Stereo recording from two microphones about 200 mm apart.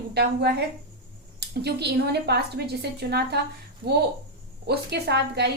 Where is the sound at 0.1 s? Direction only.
55° right (ahead or behind).